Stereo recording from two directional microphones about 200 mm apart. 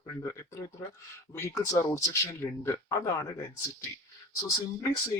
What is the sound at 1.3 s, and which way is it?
Speech, 15° left (ahead or behind).